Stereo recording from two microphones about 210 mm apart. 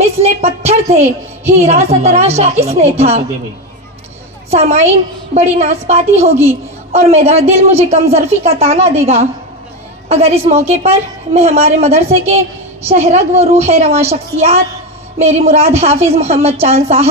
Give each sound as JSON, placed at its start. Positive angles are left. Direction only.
{"t": 0.0, "sound": "a sound", "side_deg": -30}
{"t": 1.6, "sound": "a woman's voice", "side_deg": -30}
{"t": 4.5, "sound": "a woman's voice", "side_deg": -30}